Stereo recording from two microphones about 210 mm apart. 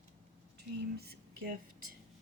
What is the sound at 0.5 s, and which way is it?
Speech, 50° right (ahead or behind).